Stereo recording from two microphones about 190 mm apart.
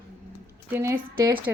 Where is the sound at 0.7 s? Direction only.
15° right (ahead or behind).